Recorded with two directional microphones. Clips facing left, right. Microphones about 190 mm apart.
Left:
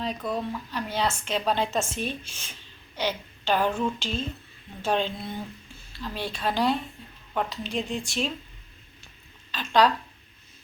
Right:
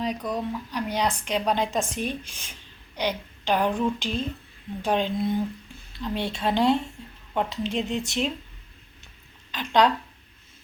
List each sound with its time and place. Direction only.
0.0 s a woman's voice: 15° right (ahead or behind)
9.5 s speech: 20° right (ahead or behind)